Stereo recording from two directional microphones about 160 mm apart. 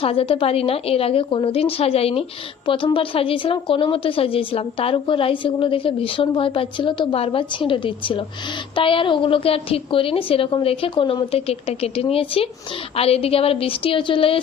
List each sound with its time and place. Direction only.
0.0 s a woman's voice: 35° left (ahead or behind)